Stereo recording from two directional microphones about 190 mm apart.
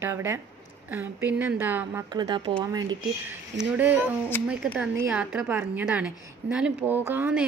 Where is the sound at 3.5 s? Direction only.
10° right (ahead or behind).